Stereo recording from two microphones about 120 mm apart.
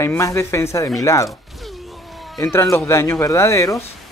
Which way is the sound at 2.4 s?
20° left (ahead or behind).